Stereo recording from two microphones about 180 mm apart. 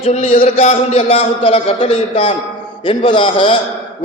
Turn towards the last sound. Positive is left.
turn(degrees=30)  # may be behind; listen again after turning